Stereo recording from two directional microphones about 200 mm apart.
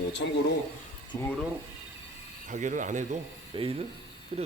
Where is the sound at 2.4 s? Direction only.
40° right (ahead or behind).